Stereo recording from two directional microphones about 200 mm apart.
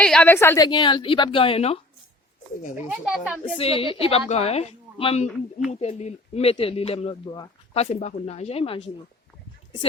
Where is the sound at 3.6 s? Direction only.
30° left (ahead or behind).